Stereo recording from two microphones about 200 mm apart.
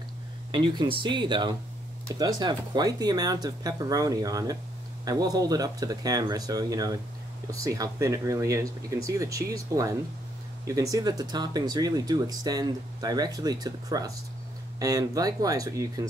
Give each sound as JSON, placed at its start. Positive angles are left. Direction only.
{"t": 0.5, "sound": "speech", "side_deg": -20}